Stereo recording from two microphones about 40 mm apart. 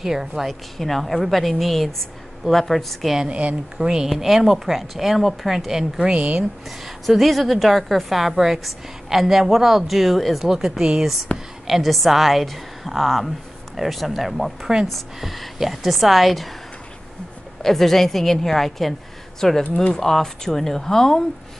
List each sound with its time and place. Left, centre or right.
0.0 s speech: centre
0.5 s a woman's voice: centre
3.3 s speech: right
3.7 s a woman's voice: centre
5.7 s speech: centre
6.1 s speech: right
7.1 s a woman's voice: centre
10.8 s a woman's voice: centre
11.3 s a woman's voice: left
11.6 s a woman's voice: centre
17.6 s a woman's voice: centre